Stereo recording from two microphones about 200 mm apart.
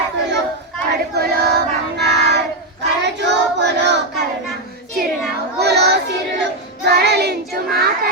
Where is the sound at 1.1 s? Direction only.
50° right (ahead or behind).